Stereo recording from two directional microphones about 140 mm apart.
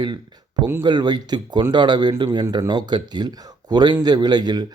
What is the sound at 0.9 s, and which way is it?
Speech, 30° right (ahead or behind).